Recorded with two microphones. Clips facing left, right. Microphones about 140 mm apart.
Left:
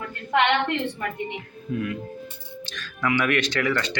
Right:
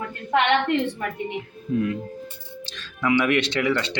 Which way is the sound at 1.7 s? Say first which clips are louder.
Right 4 dB; 30° right (ahead or behind).